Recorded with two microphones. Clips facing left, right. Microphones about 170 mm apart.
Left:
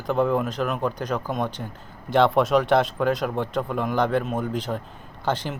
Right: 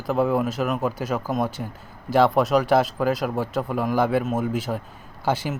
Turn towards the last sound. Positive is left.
turn(degrees=-10)  # may be behind; listen again after turning